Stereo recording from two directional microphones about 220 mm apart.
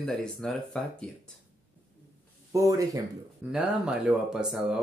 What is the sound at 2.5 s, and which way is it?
Speech, 15° right (ahead or behind).